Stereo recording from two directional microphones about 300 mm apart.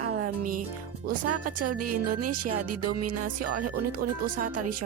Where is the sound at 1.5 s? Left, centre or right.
Right.